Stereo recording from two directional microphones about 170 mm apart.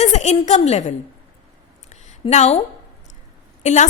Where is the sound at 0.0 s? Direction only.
40° left (ahead or behind).